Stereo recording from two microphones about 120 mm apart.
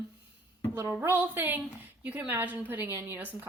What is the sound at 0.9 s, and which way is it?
A woman's voice, 20° right (ahead or behind).